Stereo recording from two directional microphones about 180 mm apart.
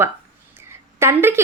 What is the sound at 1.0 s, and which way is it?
Speech, 15° right (ahead or behind).